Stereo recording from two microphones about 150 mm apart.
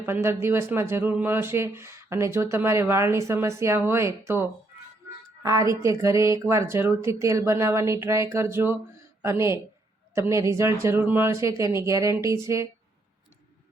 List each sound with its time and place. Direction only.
0.0 s speech: 15° right (ahead or behind)
5.4 s a woman's voice: 25° right (ahead or behind)